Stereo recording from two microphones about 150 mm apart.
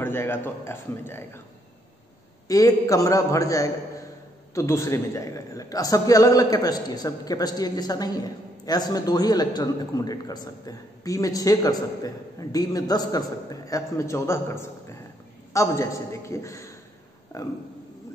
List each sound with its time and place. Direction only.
0.0 s speech: 15° left (ahead or behind)
2.4 s a man's voice: 25° left (ahead or behind)